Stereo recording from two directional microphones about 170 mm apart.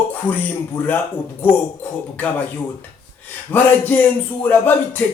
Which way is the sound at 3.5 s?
10° left (ahead or behind).